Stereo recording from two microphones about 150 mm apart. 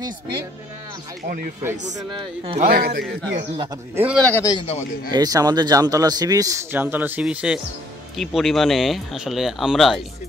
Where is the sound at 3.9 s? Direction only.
10° right (ahead or behind).